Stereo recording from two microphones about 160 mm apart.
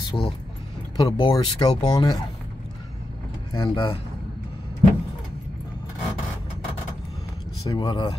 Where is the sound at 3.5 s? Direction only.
30° left (ahead or behind).